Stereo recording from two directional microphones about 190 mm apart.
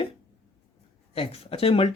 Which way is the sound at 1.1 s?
30° left (ahead or behind).